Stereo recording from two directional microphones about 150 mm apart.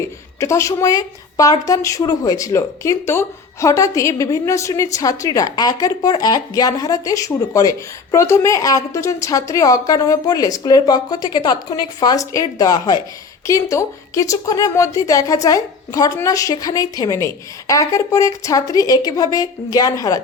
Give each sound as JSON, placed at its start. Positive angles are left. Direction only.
{"t": 0.3, "sound": "a woman's voice", "side_deg": 20}